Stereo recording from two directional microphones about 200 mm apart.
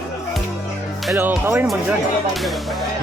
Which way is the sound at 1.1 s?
10° right (ahead or behind).